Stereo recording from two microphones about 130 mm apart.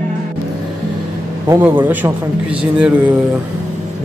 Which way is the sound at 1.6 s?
15° right (ahead or behind).